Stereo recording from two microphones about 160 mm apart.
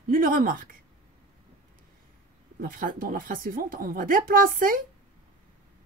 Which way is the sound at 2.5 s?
60° right (ahead or behind).